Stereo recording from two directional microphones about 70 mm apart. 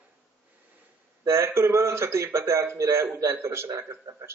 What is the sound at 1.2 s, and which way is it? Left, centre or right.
A man's voice, right.